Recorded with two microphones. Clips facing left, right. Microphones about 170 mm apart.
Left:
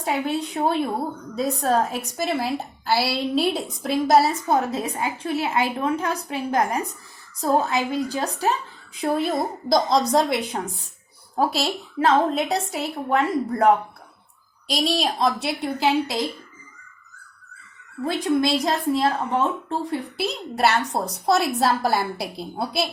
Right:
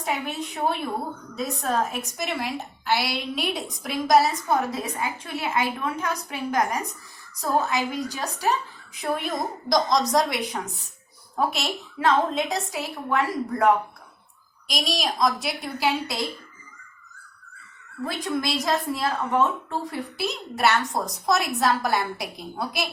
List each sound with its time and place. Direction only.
0.0 s a woman's voice: 30° left (ahead or behind)
7.7 s a woman's voice: 30° left (ahead or behind)
18.0 s a woman's voice: 30° left (ahead or behind)